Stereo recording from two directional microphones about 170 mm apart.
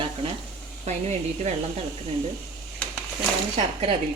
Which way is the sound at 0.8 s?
40° right (ahead or behind).